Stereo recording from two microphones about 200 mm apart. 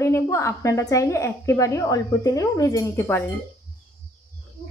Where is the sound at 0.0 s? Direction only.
15° left (ahead or behind).